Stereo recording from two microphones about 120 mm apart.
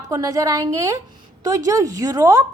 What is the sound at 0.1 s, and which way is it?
A woman's voice, 30° right (ahead or behind).